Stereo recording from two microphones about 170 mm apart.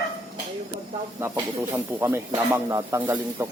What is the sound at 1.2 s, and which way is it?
Speech, 15° right (ahead or behind).